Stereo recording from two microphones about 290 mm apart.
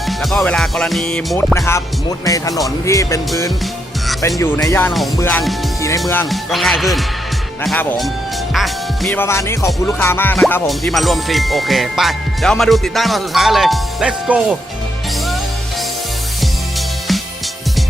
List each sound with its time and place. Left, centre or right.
0.0 s music: centre
1.5 s speech: centre
6.0 s music: centre